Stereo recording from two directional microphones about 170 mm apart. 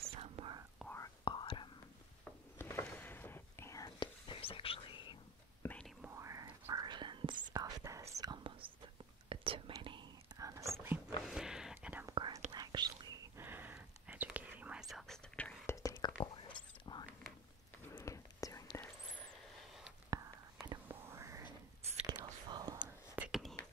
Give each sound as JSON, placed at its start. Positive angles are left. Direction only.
{"t": 0.0, "sound": "whispering", "side_deg": -35}
{"t": 0.9, "sound": "whispering", "side_deg": 25}
{"t": 2.6, "sound": "whispering", "side_deg": 10}
{"t": 5.6, "sound": "whispering", "side_deg": 10}
{"t": 6.0, "sound": "whispering", "side_deg": -15}
{"t": 11.2, "sound": "whispering", "side_deg": -5}
{"t": 12.1, "sound": "whispering", "side_deg": -20}
{"t": 13.5, "sound": "whispering", "side_deg": -10}
{"t": 15.6, "sound": "whispering", "side_deg": 15}
{"t": 17.8, "sound": "whispering", "side_deg": 15}
{"t": 20.1, "sound": "whispering", "side_deg": -20}
{"t": 22.8, "sound": "whispering", "side_deg": -5}